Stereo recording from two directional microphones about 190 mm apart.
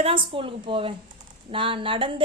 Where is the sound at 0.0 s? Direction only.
30° right (ahead or behind).